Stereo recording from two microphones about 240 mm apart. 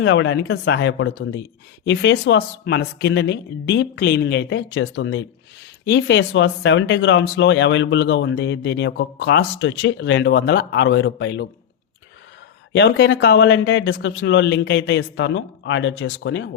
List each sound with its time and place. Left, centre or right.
0.0 s speech: left
12.7 s speech: left